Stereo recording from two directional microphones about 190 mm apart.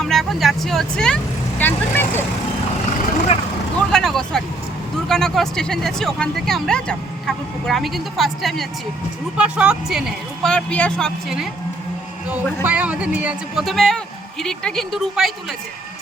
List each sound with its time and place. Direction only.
0.0 s speech: centre (ahead or behind)
3.3 s speech: 35° left (ahead or behind)
3.8 s speech: centre (ahead or behind)
12.6 s speech: 5° right (ahead or behind)